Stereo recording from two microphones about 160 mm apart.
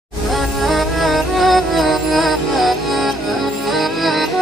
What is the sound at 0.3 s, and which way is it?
Music, centre (ahead or behind).